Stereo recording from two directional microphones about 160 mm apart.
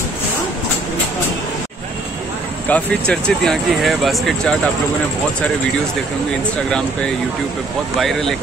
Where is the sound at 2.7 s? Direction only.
5° left (ahead or behind).